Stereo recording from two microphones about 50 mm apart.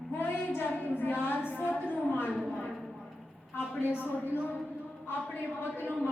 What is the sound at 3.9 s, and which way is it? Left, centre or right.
Speech, left.